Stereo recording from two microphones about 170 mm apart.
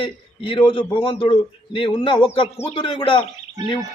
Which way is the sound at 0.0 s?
30° left (ahead or behind).